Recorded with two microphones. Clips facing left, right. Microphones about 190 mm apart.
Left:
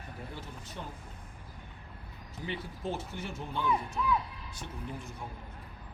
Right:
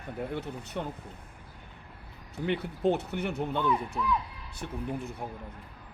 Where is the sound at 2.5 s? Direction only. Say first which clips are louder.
Right 10 dB; 65° right (ahead or behind).